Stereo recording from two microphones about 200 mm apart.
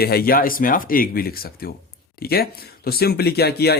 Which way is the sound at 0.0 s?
50° left (ahead or behind).